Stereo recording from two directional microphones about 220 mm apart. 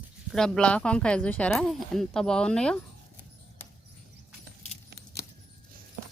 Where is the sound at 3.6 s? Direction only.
10° left (ahead or behind).